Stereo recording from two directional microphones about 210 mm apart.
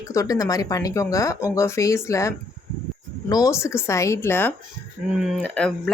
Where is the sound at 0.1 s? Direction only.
15° left (ahead or behind).